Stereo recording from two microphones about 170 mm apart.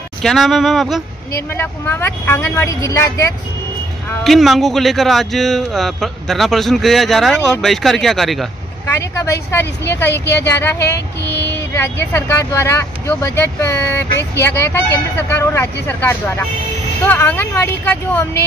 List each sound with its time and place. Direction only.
0.2 s speech: centre (ahead or behind)
1.3 s speech: 15° left (ahead or behind)
4.2 s speech: centre (ahead or behind)
8.8 s speech: 15° left (ahead or behind)
10.0 s speech: 85° left
10.5 s speech: 15° left (ahead or behind)